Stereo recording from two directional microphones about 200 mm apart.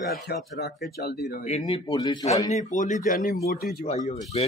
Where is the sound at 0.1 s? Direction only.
55° left (ahead or behind).